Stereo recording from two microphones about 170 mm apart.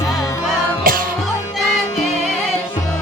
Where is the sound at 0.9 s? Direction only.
55° right (ahead or behind).